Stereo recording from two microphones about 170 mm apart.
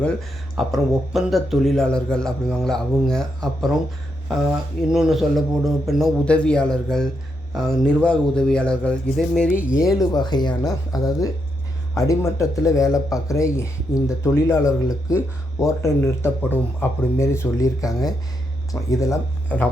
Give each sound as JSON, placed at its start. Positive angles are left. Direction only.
{"t": 0.0, "sound": "speech", "side_deg": 0}
{"t": 9.9, "sound": "speech", "side_deg": 25}